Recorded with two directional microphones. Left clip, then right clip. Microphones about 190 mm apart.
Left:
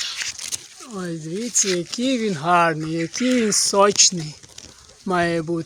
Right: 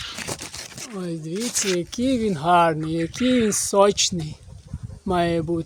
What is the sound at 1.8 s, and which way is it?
Speech, 5° right (ahead or behind).